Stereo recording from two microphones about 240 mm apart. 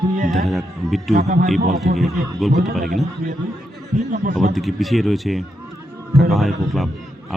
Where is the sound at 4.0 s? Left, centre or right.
Right.